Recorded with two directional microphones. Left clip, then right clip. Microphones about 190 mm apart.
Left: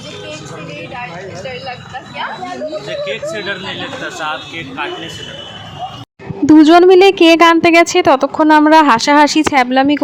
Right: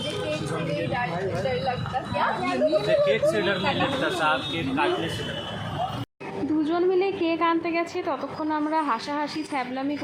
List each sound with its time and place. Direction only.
3.0 s speech: centre (ahead or behind)
6.6 s a woman's voice: 55° left (ahead or behind)